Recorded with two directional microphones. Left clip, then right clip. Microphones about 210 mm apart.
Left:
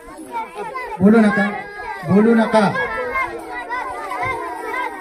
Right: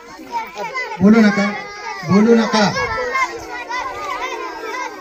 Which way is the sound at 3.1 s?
10° left (ahead or behind).